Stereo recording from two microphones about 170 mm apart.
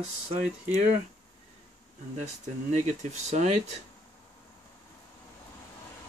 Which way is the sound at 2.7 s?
40° right (ahead or behind).